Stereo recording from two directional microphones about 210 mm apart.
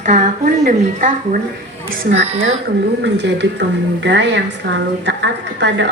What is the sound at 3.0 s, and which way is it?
A woman's voice, 55° right (ahead or behind).